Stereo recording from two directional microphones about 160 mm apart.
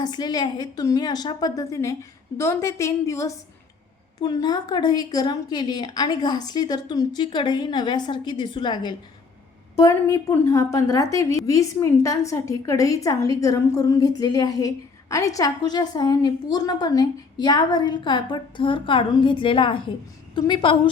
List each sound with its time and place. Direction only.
0.0 s a woman's voice: 25° left (ahead or behind)